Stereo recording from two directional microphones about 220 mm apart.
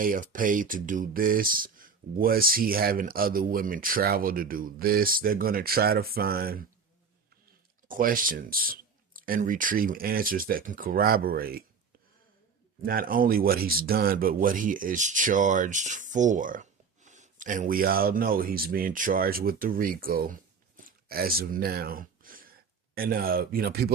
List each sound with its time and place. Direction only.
0.0 s speech: 40° right (ahead or behind)
7.9 s speech: 40° right (ahead or behind)
12.8 s speech: 40° right (ahead or behind)